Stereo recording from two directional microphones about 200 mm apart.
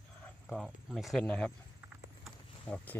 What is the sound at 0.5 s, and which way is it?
Speech, centre (ahead or behind).